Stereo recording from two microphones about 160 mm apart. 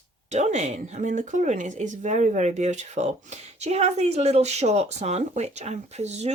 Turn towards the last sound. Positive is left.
turn(degrees=-45)  # may be behind; listen again after turning